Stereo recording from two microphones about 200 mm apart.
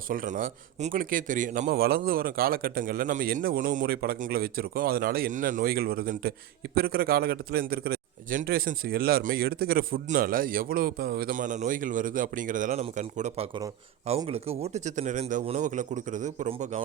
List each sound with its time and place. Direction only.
0.1 s a man's voice: 45° right (ahead or behind)